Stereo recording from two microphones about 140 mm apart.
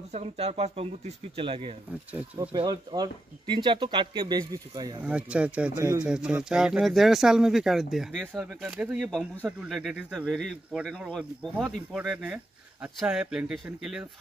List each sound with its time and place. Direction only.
0.1 s speech: 50° right (ahead or behind); by 5.0 s 25° right (ahead or behind)
5.0 s speech: 10° right (ahead or behind)